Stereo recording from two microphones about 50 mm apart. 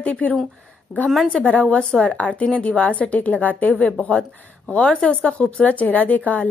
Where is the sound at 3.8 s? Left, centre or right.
Centre.